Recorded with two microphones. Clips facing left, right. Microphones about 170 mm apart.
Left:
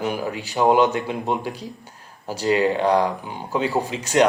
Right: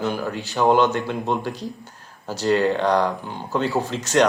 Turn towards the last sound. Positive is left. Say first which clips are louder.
# even
turn(degrees=10)  # may be behind; listen again after turning